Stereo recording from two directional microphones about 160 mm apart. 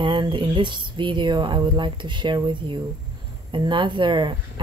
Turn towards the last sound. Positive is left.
turn(degrees=-30)  # may be behind; listen again after turning